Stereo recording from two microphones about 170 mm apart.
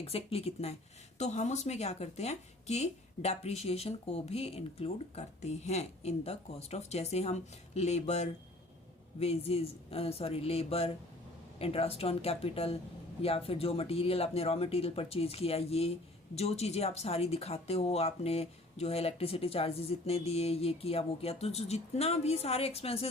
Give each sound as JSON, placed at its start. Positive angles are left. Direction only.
{"t": 0.0, "sound": "speech", "side_deg": 35}